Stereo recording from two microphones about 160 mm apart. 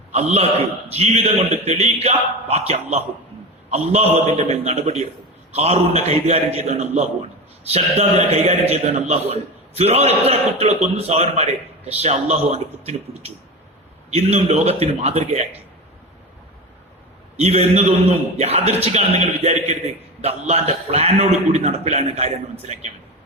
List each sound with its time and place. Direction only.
0.1 s a man's voice: 40° right (ahead or behind)
17.3 s a man's voice: 40° right (ahead or behind)